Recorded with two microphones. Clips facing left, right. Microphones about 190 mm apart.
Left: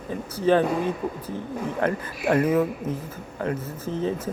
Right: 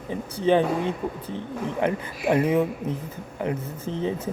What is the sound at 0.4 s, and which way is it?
A man's voice, 20° right (ahead or behind).